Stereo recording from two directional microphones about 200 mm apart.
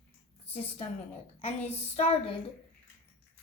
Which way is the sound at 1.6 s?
30° left (ahead or behind).